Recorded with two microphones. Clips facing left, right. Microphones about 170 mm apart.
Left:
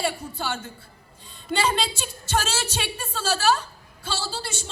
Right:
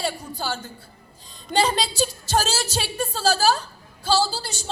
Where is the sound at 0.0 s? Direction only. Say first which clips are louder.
Even; 35° right (ahead or behind).